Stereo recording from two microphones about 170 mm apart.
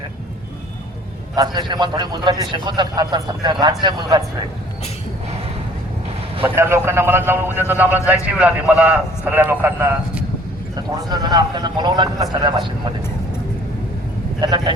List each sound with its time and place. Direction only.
1.4 s a man's voice: 25° right (ahead or behind)
6.4 s a man's voice: 15° right (ahead or behind)
14.4 s a man's voice: 25° right (ahead or behind)